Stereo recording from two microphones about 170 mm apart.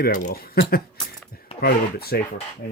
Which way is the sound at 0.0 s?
60° left (ahead or behind).